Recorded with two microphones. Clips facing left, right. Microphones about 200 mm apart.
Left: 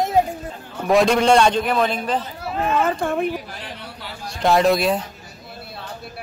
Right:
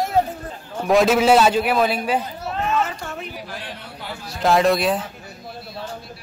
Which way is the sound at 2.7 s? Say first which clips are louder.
Left 7 dB; 55° left (ahead or behind).